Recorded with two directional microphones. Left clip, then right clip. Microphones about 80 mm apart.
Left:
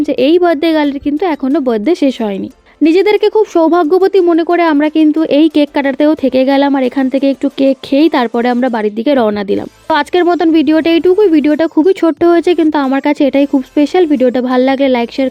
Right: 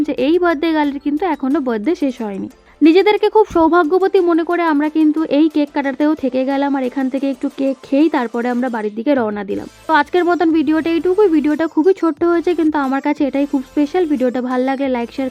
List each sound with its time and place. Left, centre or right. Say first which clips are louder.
0.2 s a woman's voice: left 6 dB; left
1.9 s speech: left 7 dB; left
2.8 s speech: left 2 dB; left
7.6 s speech: left 5 dB; left
12.0 s speech: left 6 dB; left
14.2 s speech: left 7 dB; left